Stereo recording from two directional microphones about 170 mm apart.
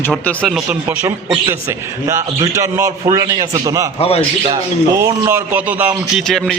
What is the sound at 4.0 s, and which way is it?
Speech, 35° left (ahead or behind).